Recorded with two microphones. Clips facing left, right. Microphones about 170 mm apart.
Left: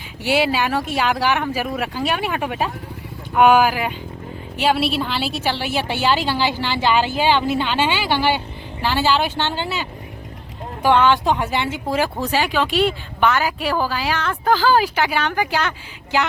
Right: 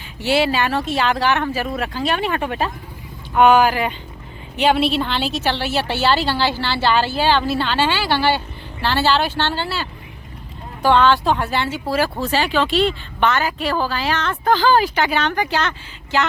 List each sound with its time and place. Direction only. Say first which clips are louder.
0.2 s a woman's voice: right 1 dB; 15° left (ahead or behind)
10.8 s a woman's voice: right 1 dB; 15° left (ahead or behind)